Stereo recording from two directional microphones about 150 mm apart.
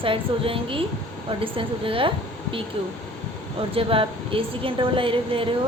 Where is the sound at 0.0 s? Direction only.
35° right (ahead or behind).